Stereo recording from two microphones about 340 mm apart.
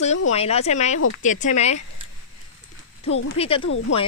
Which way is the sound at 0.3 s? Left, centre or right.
Centre.